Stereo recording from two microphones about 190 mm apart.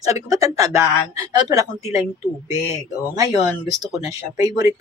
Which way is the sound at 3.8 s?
20° right (ahead or behind).